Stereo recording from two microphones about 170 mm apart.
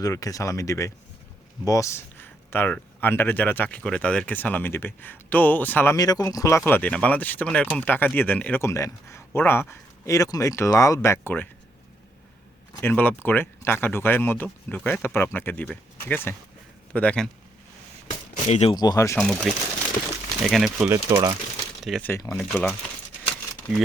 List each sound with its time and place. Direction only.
0.0 s speech: 20° left (ahead or behind)
12.7 s speech: 10° left (ahead or behind)
18.4 s speech: 40° left (ahead or behind)
18.7 s speech: 25° left (ahead or behind)
19.1 s speech: centre (ahead or behind)
21.1 s speech: 25° right (ahead or behind)
21.8 s speech: centre (ahead or behind)
22.1 s speech: 15° left (ahead or behind)